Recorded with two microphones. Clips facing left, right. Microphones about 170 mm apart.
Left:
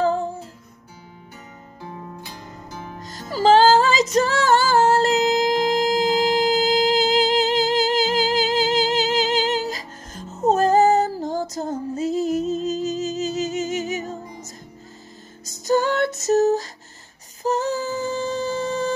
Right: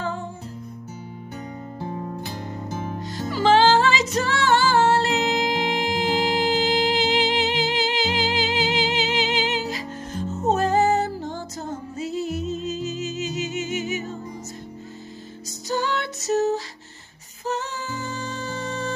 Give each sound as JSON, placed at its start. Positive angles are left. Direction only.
{"t": 3.0, "sound": "music", "side_deg": 45}
{"t": 15.4, "sound": "music", "side_deg": 45}